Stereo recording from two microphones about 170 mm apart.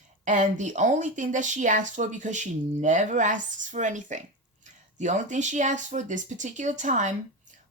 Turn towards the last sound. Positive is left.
turn(degrees=-45)  # may be behind; listen again after turning